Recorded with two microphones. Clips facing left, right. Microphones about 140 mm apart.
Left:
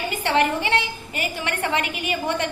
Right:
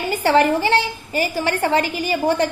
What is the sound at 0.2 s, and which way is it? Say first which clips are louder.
A woman's voice: right 5 dB; 40° right (ahead or behind).